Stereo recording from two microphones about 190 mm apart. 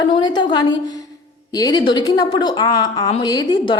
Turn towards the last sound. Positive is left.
turn(degrees=20)  # may be behind; listen again after turning